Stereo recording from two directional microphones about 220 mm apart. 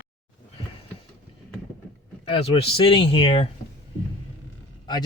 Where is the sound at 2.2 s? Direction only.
25° left (ahead or behind).